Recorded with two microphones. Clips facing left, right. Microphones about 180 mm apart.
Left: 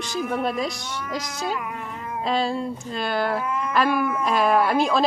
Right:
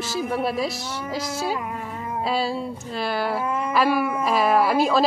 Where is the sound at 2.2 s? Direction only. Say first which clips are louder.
Left 2 dB; 5° right (ahead or behind).